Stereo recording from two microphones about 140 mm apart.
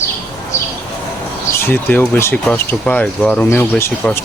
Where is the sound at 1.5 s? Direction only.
15° left (ahead or behind).